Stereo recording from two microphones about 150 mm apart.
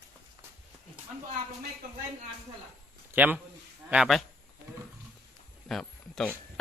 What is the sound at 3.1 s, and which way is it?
A man's voice, 10° right (ahead or behind).